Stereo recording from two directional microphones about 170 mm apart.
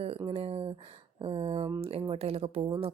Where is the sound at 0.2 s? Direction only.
35° right (ahead or behind).